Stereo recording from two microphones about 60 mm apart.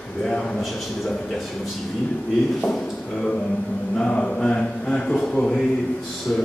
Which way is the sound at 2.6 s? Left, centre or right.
Centre.